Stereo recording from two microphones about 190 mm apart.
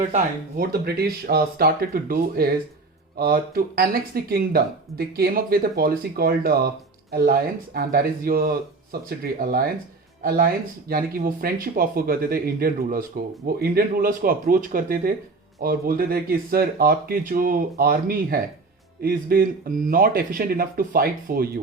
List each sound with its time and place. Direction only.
0.5 s speech: 55° right (ahead or behind)